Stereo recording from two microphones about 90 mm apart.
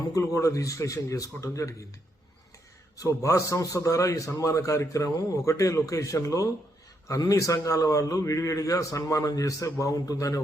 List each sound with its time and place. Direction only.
0.1 s a man's voice: 35° left (ahead or behind)
3.0 s a man's voice: 35° left (ahead or behind)